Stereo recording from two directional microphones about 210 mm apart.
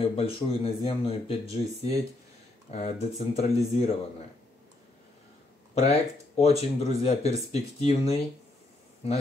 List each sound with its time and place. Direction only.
0.0 s speech: 25° left (ahead or behind)
5.8 s speech: 30° left (ahead or behind)